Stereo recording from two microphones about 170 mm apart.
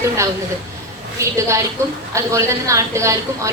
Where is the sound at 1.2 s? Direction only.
15° right (ahead or behind).